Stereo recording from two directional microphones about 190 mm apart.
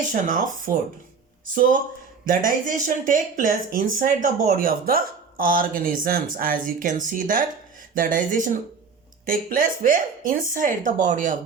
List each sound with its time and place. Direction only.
0.1 s speech: 45° right (ahead or behind)
2.2 s speech: 45° right (ahead or behind)